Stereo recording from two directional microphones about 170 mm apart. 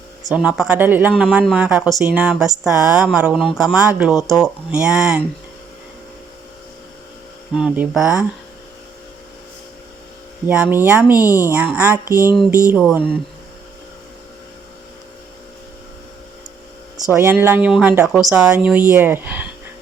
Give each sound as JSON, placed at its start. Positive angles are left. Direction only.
{"t": 0.3, "sound": "speech", "side_deg": -5}
{"t": 7.5, "sound": "speech", "side_deg": -5}
{"t": 10.4, "sound": "speech", "side_deg": -10}
{"t": 11.2, "sound": "a woman's voice", "side_deg": 20}
{"t": 11.4, "sound": "speech", "side_deg": -10}
{"t": 12.1, "sound": "a woman's voice", "side_deg": 20}
{"t": 12.7, "sound": "speech", "side_deg": -10}
{"t": 17.1, "sound": "speech", "side_deg": -10}